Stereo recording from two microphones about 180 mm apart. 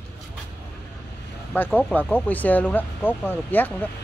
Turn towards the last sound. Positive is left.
turn(degrees=10)  # may be behind; listen again after turning